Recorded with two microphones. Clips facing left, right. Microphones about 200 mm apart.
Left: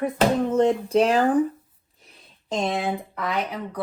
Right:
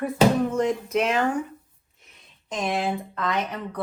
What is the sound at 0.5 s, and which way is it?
Speech, 30° left (ahead or behind).